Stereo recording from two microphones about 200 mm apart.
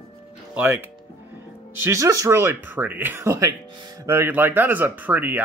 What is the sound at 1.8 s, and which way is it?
Speech, 15° right (ahead or behind).